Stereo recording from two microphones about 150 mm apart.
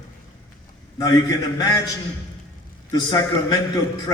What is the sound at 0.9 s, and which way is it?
Speech, 25° left (ahead or behind).